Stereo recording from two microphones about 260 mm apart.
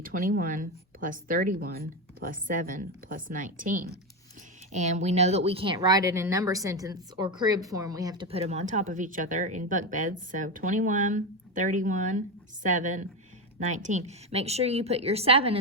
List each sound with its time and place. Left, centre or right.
0.0 s speech: right